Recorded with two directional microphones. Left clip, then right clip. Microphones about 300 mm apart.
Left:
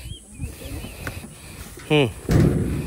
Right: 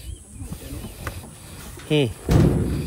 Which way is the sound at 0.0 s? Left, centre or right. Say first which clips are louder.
Left 3 dB; centre.